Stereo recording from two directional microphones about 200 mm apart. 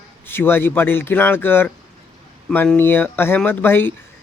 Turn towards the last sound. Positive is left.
turn(degrees=10)  # may be behind; listen again after turning